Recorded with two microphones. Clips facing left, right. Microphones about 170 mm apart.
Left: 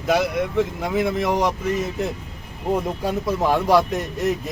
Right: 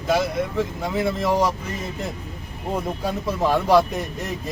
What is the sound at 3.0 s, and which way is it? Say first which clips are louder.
A man's voice: left 1 dB; 15° left (ahead or behind).